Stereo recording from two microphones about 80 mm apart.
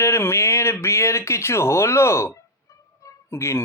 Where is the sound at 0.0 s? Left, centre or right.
Left.